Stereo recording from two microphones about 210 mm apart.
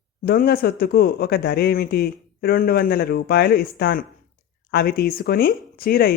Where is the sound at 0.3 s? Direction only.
45° left (ahead or behind).